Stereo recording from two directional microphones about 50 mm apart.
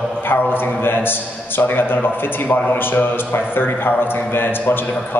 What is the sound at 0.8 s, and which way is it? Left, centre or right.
A man's voice, left.